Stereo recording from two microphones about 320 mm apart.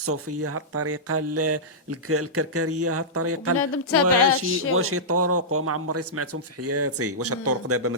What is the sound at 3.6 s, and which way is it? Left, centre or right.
Music, left.